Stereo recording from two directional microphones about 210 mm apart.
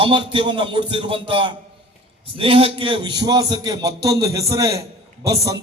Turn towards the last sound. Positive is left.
turn(degrees=-15)  # may be behind; listen again after turning